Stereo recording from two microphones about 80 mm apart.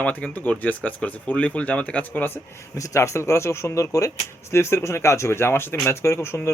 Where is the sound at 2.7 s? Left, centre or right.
Left.